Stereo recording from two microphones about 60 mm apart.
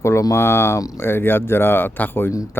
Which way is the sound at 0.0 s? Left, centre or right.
Left.